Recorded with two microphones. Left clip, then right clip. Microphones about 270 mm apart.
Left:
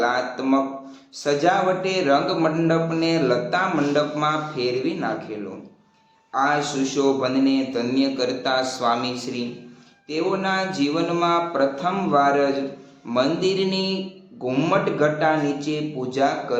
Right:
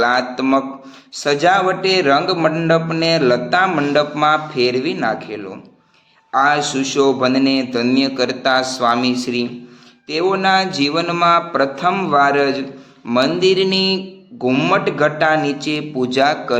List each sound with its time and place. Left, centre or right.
0.0 s a man's voice: right